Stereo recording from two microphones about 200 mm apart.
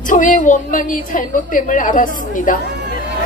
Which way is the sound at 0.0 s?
40° left (ahead or behind).